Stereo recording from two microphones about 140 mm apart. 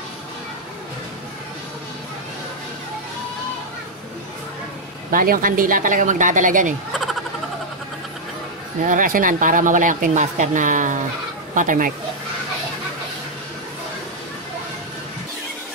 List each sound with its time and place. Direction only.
5.1 s speech: 85° right; by 6.7 s 70° right (ahead or behind)
6.9 s a sound: centre (ahead or behind)
8.8 s speech: 70° right (ahead or behind)